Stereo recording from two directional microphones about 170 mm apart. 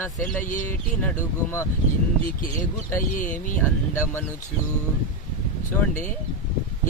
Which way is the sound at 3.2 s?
50° left (ahead or behind).